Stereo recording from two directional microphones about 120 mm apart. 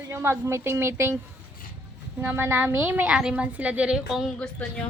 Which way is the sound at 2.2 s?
15° right (ahead or behind).